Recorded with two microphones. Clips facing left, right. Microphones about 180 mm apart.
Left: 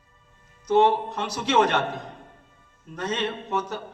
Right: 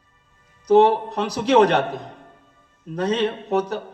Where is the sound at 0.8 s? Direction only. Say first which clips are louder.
Right 3 dB; 35° right (ahead or behind).